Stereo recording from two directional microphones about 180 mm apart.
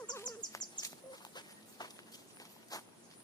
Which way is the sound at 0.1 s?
20° left (ahead or behind).